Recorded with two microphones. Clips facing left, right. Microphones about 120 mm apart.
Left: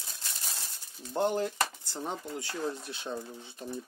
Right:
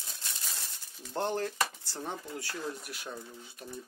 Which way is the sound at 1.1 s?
15° left (ahead or behind).